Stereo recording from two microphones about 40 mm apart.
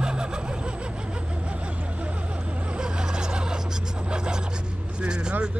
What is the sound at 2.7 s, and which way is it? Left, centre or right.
Vehicle, centre.